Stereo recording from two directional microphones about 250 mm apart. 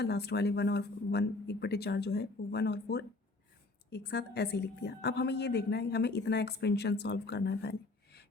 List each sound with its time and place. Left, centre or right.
0.0 s a woman's voice: left